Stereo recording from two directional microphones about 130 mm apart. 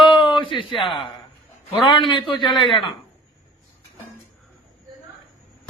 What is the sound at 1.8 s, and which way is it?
Speech, 40° left (ahead or behind).